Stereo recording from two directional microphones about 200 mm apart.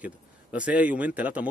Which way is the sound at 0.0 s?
5° right (ahead or behind).